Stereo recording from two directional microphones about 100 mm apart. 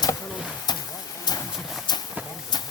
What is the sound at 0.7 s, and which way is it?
Vehicle, 45° left (ahead or behind).